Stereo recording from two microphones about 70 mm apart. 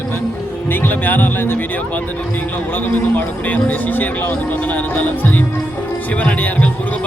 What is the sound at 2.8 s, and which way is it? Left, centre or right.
A man's voice, left.